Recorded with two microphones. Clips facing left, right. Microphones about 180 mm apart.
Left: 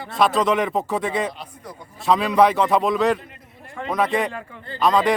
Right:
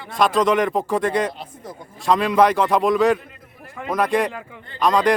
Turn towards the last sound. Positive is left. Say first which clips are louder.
# even
turn(degrees=0)  # may be behind; listen again after turning